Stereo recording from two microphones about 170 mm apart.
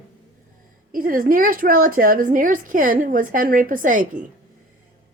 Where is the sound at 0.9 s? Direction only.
55° right (ahead or behind).